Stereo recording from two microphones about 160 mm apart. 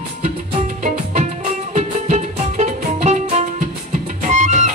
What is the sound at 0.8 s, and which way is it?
Music, 50° right (ahead or behind).